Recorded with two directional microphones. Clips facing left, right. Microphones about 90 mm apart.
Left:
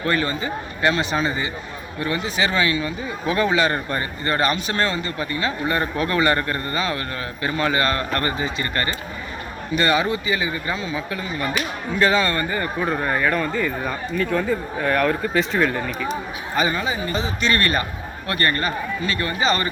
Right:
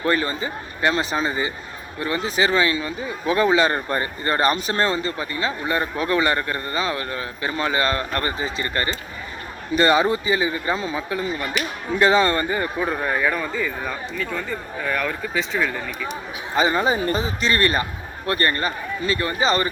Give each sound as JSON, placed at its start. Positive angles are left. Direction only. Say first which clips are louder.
{"t": 0.0, "sound": "a man's voice", "louder": "even", "side_deg": -25}
{"t": 2.0, "sound": "speech", "louder": "right 1 dB", "side_deg": -35}
{"t": 5.1, "sound": "speech", "louder": "left 1 dB", "side_deg": -20}
{"t": 8.4, "sound": "a man's voice", "louder": "left 1 dB", "side_deg": -30}
{"t": 8.6, "sound": "a man's voice", "louder": "even", "side_deg": -20}
{"t": 9.7, "sound": "a man's voice", "louder": "right 3 dB", "side_deg": -30}
{"t": 10.8, "sound": "speech", "louder": "right 1 dB", "side_deg": -40}
{"t": 11.1, "sound": "a man's voice", "louder": "even", "side_deg": -25}
{"t": 12.7, "sound": "speech", "louder": "left 1 dB", "side_deg": 0}
{"t": 16.6, "sound": "a man's voice", "louder": "right 2 dB", "side_deg": -25}
{"t": 16.8, "sound": "speech", "louder": "right 4 dB", "side_deg": -40}
{"t": 17.6, "sound": "a man's voice", "louder": "right 1 dB", "side_deg": -20}